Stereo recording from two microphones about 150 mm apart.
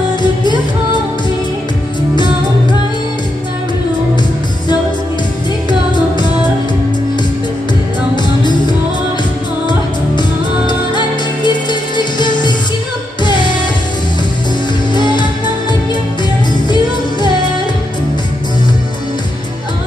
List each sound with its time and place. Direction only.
0.2 s music: 30° left (ahead or behind)
10.7 s music: 30° left (ahead or behind)
15.0 s music: 30° left (ahead or behind)
16.6 s music: 30° left (ahead or behind)